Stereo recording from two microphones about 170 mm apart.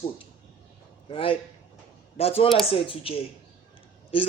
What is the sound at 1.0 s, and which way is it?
Speech, 30° left (ahead or behind).